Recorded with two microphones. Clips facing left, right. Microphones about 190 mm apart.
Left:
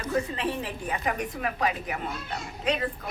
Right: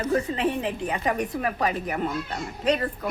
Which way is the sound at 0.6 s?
20° right (ahead or behind).